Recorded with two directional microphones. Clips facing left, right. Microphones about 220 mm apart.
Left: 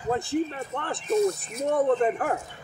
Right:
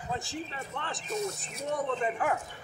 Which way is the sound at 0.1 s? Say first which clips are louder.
Left 11 dB; 55° left (ahead or behind).